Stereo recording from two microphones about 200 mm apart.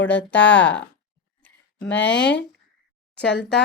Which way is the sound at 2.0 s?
65° left (ahead or behind).